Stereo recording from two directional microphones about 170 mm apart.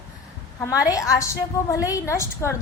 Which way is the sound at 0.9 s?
20° left (ahead or behind).